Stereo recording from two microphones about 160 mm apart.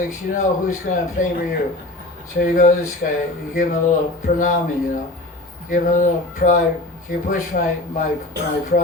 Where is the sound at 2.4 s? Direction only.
55° left (ahead or behind).